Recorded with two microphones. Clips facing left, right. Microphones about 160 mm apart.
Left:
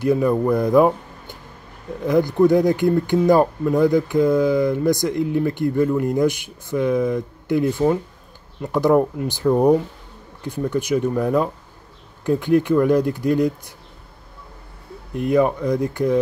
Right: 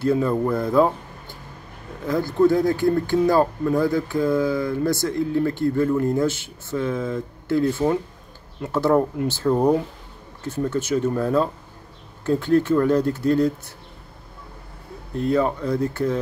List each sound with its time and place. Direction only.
0.0 s speech: 15° left (ahead or behind)
15.1 s speech: 15° left (ahead or behind)